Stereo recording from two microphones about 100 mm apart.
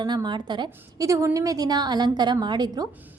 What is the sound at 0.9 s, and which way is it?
A woman's voice, 30° right (ahead or behind).